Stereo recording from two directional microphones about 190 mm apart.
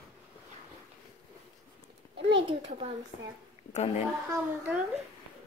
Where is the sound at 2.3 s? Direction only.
25° right (ahead or behind).